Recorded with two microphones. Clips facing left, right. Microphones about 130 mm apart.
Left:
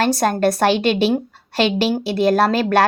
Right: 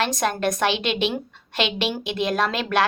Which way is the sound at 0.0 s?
40° left (ahead or behind).